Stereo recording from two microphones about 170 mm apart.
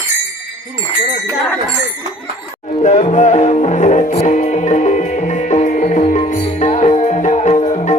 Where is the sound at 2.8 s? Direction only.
45° left (ahead or behind).